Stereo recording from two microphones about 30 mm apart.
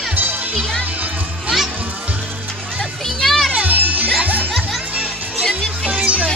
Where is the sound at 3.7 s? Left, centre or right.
Right.